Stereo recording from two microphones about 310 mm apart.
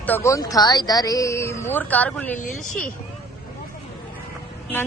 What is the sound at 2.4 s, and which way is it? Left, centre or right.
Speech, left.